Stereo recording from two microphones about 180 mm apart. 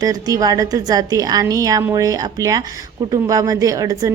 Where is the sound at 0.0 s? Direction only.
20° right (ahead or behind).